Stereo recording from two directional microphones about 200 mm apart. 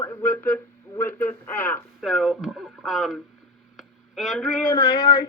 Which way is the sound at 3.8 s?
Centre (ahead or behind).